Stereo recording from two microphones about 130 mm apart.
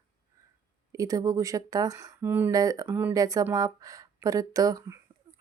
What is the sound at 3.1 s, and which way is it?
Speech, 30° right (ahead or behind).